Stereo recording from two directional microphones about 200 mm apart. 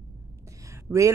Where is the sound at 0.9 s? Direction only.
15° right (ahead or behind).